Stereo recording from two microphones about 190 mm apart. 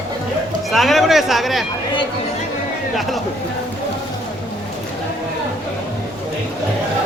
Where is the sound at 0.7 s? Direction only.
Centre (ahead or behind).